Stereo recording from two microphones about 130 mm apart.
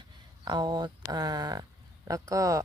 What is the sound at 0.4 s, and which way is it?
Speech, 35° right (ahead or behind).